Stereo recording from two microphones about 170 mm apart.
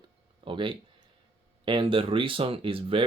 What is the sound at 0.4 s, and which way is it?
Speech, 30° right (ahead or behind).